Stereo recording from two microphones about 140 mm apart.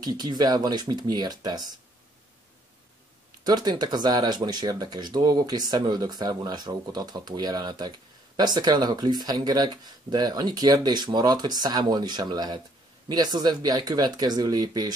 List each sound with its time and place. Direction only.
0.0 s speech: 30° right (ahead or behind)
3.4 s speech: 30° right (ahead or behind)